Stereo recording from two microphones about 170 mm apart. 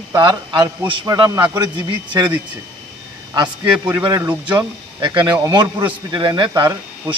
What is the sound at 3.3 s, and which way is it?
A man's voice, 25° right (ahead or behind).